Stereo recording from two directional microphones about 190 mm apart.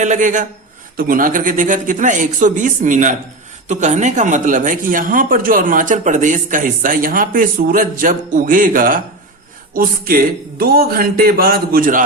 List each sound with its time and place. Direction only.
0.0 s speech: 40° right (ahead or behind)